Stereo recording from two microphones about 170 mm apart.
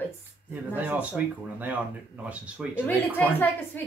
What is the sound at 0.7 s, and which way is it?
Speech, 10° right (ahead or behind).